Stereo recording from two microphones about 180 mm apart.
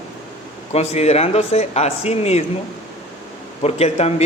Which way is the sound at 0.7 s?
35° left (ahead or behind).